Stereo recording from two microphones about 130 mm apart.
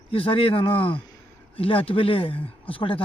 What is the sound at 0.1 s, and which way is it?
Speech, 45° left (ahead or behind).